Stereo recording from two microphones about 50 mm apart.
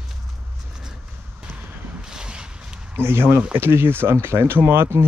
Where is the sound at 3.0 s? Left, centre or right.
Right.